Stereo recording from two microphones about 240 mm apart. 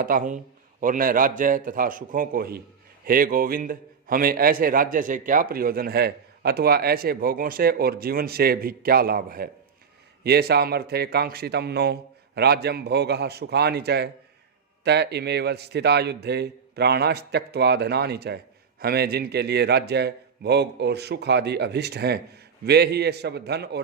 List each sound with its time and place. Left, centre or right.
0.0 s a man's voice: right